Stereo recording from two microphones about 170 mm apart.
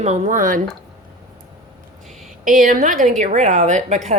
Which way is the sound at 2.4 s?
55° right (ahead or behind).